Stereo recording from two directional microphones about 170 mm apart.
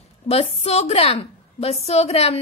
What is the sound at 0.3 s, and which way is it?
Speech, 40° left (ahead or behind).